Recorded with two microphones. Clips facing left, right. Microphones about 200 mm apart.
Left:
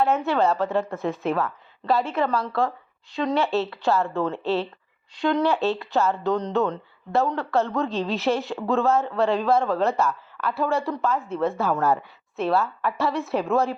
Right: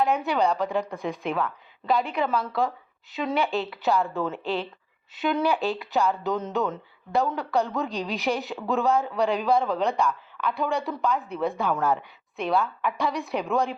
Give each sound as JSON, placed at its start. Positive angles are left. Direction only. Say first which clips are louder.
{"t": 0.0, "sound": "speech", "louder": "left 2 dB", "side_deg": 0}